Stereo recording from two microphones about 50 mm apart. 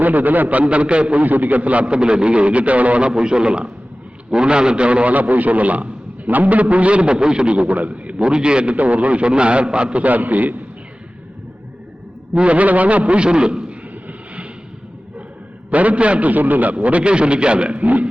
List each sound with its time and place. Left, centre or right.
0.0 s a man's voice: right
12.3 s a man's voice: right
14.1 s vehicle: right
15.7 s a man's voice: right